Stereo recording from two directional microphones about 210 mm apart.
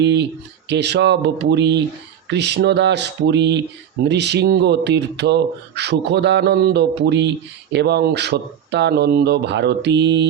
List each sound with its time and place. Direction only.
0.0 s speech: 55° right (ahead or behind)